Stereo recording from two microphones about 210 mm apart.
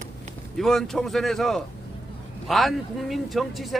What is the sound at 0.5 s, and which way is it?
Speech, centre (ahead or behind).